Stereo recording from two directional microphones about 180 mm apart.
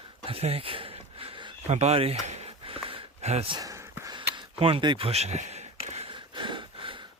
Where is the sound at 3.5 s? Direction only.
20° right (ahead or behind).